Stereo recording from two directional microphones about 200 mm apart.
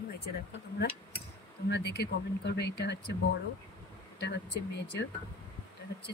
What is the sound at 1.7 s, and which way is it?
Speech, 55° left (ahead or behind).